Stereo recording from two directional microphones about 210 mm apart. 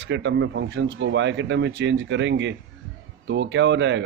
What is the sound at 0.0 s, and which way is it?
Speech, 60° right (ahead or behind).